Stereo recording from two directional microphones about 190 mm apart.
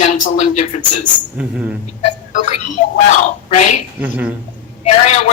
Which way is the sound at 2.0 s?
35° left (ahead or behind).